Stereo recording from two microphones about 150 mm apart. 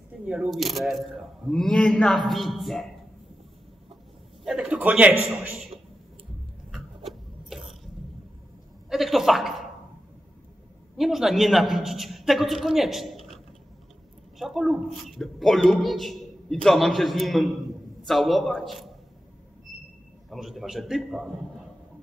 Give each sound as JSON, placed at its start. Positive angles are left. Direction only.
{"t": 0.2, "sound": "a man's voice", "side_deg": -5}
{"t": 4.5, "sound": "a man's voice", "side_deg": -5}
{"t": 6.7, "sound": "a sound", "side_deg": 0}
{"t": 8.8, "sound": "a woman's voice", "side_deg": 0}
{"t": 11.0, "sound": "a man's voice", "side_deg": 0}
{"t": 14.4, "sound": "a man's voice", "side_deg": 0}
{"t": 19.7, "sound": "a sound", "side_deg": 0}
{"t": 20.2, "sound": "a man's voice", "side_deg": 0}